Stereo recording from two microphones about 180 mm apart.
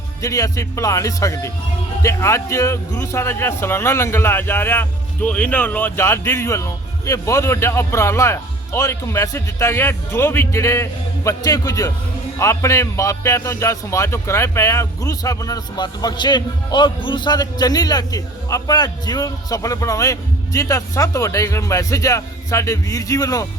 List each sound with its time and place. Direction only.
0.2 s speech: 20° left (ahead or behind)